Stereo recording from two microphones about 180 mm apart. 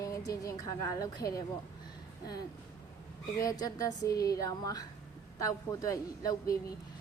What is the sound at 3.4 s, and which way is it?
A woman's voice, 20° left (ahead or behind).